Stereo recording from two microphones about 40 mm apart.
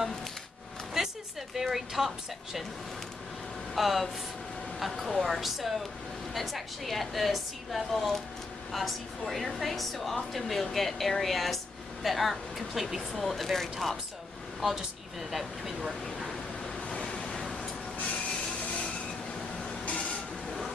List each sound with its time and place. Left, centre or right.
0.9 s a woman's voice: centre
3.7 s speech: centre
15.3 s speech: centre
16.9 s waves: left
19.8 s printer: left